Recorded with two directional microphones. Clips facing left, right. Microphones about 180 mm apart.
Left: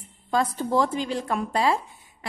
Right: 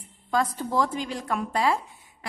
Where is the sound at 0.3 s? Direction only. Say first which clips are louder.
Left 2 dB; 25° left (ahead or behind).